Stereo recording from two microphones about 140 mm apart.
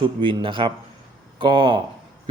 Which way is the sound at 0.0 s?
35° right (ahead or behind).